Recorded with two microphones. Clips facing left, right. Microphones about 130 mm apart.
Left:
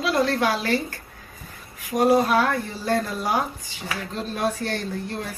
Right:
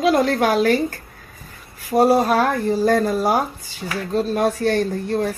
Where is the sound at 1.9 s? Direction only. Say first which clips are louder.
Right 3 dB; 35° right (ahead or behind).